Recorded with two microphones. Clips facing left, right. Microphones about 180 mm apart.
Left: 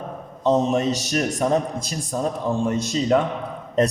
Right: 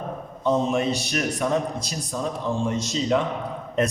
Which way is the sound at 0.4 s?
40° left (ahead or behind).